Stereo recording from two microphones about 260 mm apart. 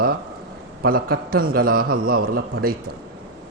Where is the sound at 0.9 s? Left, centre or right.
Right.